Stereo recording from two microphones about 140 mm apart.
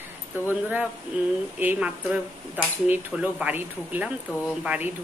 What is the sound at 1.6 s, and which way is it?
Speech, 10° right (ahead or behind).